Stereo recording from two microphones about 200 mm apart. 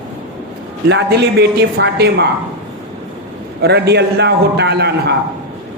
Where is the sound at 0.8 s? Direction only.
55° right (ahead or behind).